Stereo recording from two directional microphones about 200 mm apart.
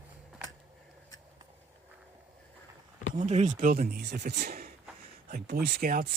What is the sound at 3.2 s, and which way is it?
Speech, 35° right (ahead or behind).